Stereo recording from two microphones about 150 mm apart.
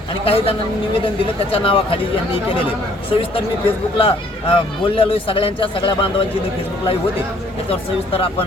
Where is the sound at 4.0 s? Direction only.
40° left (ahead or behind).